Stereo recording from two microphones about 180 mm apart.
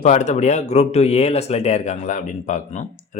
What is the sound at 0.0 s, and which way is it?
Speech, 40° left (ahead or behind).